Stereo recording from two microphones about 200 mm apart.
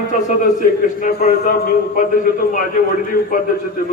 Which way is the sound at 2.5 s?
45° left (ahead or behind).